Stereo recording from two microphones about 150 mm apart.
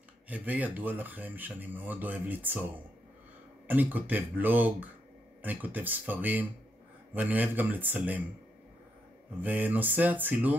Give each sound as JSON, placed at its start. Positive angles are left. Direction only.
{"t": 0.3, "sound": "speech", "side_deg": -10}
{"t": 3.6, "sound": "speech", "side_deg": -10}
{"t": 9.4, "sound": "speech", "side_deg": -10}